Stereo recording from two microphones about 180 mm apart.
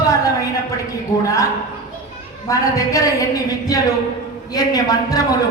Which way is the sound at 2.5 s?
20° left (ahead or behind).